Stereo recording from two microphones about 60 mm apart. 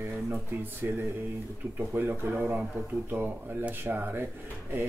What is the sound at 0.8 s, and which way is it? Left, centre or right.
Speech, right.